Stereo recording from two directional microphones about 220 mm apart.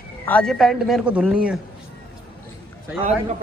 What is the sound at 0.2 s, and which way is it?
Speech, 5° left (ahead or behind).